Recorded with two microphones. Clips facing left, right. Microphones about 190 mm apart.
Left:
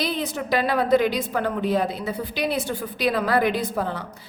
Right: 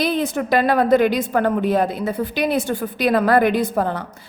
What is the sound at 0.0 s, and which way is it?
A woman's voice, 50° right (ahead or behind).